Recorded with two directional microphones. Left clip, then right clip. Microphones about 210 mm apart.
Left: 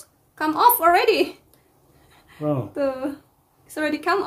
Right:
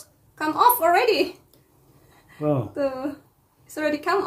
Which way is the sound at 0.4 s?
30° left (ahead or behind).